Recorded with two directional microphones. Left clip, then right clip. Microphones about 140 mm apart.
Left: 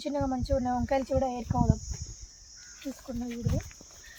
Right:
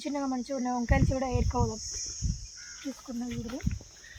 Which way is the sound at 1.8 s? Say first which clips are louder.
Right 8 dB; 90° left.